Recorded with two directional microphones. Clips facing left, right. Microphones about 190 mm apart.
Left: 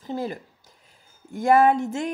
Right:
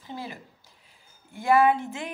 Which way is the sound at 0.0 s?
45° left (ahead or behind).